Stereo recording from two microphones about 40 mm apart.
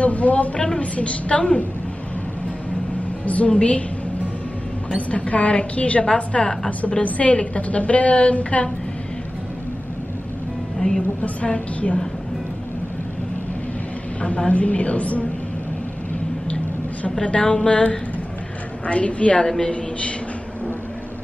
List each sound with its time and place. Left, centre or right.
0.0 s a woman's voice: left
3.3 s a woman's voice: left
4.9 s a woman's voice: left
6.3 s a woman's voice: left
7.0 s a woman's voice: left
11.2 s a woman's voice: left
14.5 s a woman's voice: left
17.1 s a woman's voice: left
18.9 s a woman's voice: left